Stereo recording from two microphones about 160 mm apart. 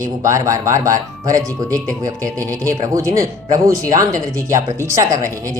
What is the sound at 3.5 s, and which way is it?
Speech, 55° right (ahead or behind).